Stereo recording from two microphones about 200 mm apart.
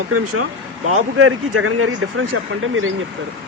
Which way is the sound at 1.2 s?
90° right.